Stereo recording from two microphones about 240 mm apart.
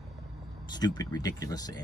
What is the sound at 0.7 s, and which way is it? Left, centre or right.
Speech, centre.